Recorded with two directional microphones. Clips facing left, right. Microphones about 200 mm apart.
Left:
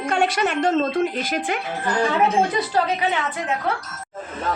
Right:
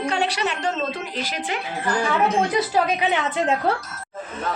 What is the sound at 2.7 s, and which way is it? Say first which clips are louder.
Speech: even; 10° right (ahead or behind).